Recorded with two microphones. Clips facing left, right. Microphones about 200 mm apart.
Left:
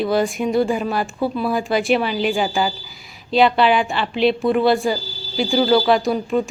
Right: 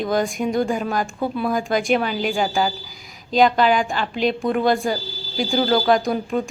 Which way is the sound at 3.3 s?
45° right (ahead or behind).